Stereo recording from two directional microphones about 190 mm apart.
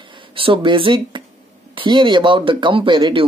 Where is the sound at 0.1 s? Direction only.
25° right (ahead or behind).